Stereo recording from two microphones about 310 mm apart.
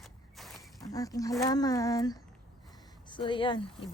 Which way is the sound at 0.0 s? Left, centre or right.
Centre.